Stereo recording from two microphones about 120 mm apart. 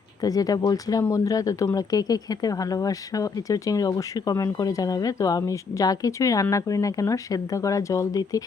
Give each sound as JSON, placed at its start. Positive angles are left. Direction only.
{"t": 0.2, "sound": "speech", "side_deg": 30}